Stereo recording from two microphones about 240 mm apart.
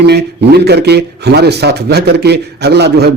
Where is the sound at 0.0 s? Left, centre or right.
Right.